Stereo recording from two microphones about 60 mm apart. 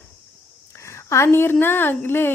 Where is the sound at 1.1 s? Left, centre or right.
Left.